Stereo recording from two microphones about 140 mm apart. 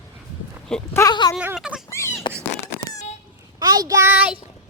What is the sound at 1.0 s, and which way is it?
Speech, 30° left (ahead or behind).